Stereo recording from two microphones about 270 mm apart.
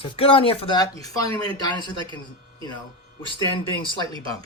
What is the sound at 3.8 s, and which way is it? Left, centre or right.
Speech, centre.